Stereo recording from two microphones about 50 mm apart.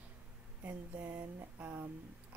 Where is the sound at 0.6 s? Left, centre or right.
Right.